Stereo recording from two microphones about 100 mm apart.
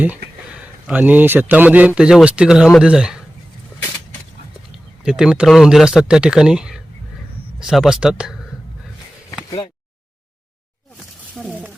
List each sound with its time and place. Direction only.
0.0 s a man's voice: 15° right (ahead or behind)
5.0 s speech: 10° right (ahead or behind)
11.4 s a sound: 15° right (ahead or behind)